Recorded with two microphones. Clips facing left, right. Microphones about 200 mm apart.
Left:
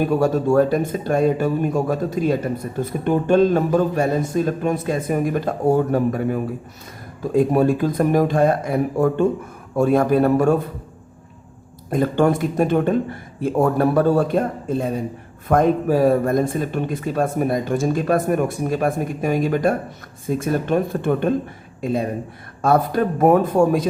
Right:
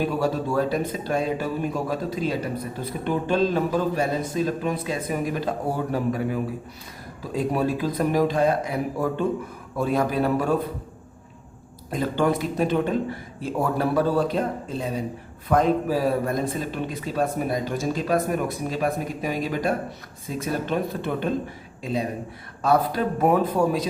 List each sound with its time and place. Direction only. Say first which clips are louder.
0.0 s a man's voice: left 6 dB; 50° left (ahead or behind)
11.9 s a man's voice: left 5 dB; 50° left (ahead or behind)